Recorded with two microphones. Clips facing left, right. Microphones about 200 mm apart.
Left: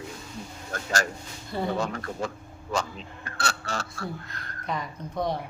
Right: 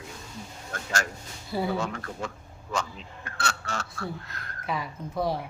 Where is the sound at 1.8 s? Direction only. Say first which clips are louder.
Left 2 dB; 35° left (ahead or behind).